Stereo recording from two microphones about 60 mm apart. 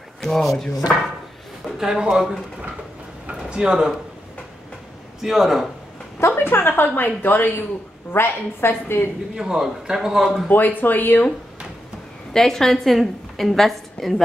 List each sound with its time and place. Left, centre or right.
0.2 s speech: centre
1.8 s a man's voice: centre
3.3 s a sound: centre
5.2 s speech: centre
6.1 s a woman's voice: left
9.3 s a man's voice: centre
10.5 s a woman's voice: left
12.3 s a woman's voice: centre